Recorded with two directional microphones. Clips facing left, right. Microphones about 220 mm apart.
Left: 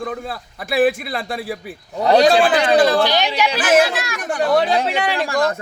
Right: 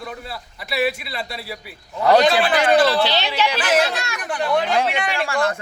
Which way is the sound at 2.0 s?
35° left (ahead or behind).